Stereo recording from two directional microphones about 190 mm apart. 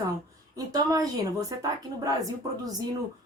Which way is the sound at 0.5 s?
20° right (ahead or behind).